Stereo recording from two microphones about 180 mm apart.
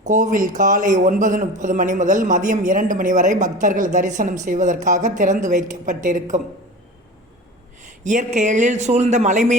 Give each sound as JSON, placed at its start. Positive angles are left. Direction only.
{"t": 0.0, "sound": "a man's voice", "side_deg": -45}
{"t": 8.0, "sound": "a man's voice", "side_deg": -40}